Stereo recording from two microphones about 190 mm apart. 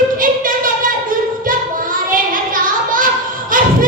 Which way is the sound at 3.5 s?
45° right (ahead or behind).